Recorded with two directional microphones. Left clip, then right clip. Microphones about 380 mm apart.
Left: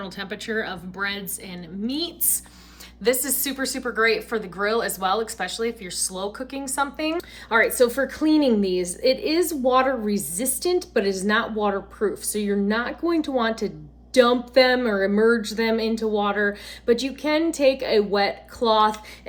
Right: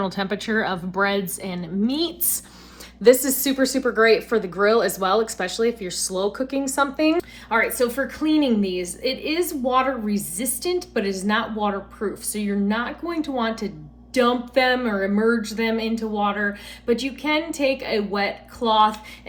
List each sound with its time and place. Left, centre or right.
0.0 s a woman's voice: centre
3.0 s speech: centre